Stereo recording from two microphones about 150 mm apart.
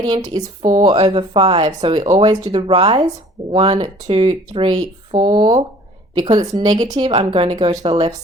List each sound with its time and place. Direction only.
0.0 s speech: 30° right (ahead or behind)
0.8 s speech: 40° right (ahead or behind)